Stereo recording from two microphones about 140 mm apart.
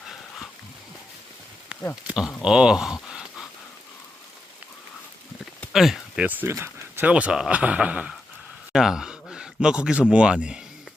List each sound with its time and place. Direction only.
1.7 s a sound: 5° right (ahead or behind)
2.0 s speech: 5° right (ahead or behind)
5.5 s speech: centre (ahead or behind)